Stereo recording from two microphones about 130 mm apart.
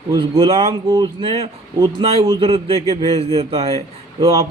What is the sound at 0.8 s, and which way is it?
Speech, 30° right (ahead or behind).